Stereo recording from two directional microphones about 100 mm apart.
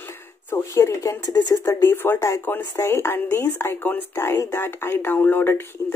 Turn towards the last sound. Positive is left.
turn(degrees=20)  # may be behind; listen again after turning